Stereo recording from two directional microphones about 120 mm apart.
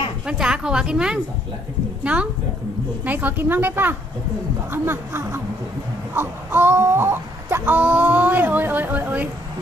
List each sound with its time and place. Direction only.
0.3 s a woman's voice: 5° right (ahead or behind)
3.0 s a woman's voice: 15° right (ahead or behind)
6.1 s a sound: 20° right (ahead or behind)